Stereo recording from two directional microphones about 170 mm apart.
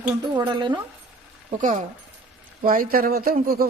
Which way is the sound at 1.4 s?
50° right (ahead or behind).